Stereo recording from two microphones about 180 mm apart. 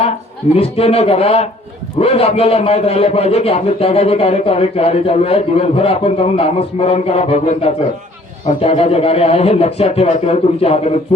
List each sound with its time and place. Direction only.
0.5 s a man's voice: 35° left (ahead or behind)